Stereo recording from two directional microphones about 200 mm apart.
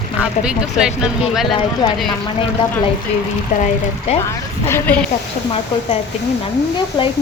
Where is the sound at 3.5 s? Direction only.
35° left (ahead or behind).